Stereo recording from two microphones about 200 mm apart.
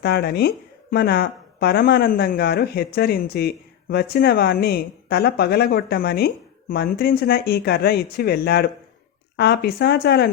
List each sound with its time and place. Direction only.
0.0 s speech: 55° left (ahead or behind)